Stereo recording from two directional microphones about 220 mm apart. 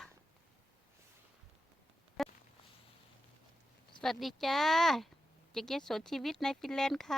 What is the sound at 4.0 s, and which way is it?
Speech, centre (ahead or behind).